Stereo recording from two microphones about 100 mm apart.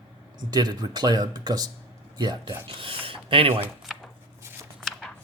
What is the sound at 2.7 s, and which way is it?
Speech, 65° right (ahead or behind).